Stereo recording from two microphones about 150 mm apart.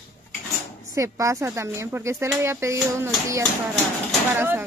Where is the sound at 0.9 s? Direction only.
20° right (ahead or behind).